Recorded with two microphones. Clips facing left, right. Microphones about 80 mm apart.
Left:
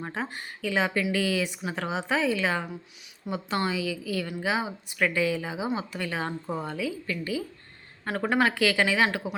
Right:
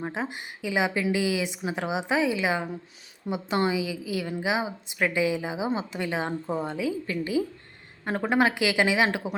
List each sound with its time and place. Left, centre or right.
0.0 s a woman's voice: centre